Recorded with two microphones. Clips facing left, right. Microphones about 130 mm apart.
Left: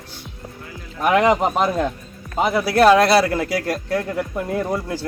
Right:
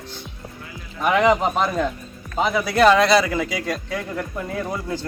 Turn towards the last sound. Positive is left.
turn(degrees=5)  # may be behind; listen again after turning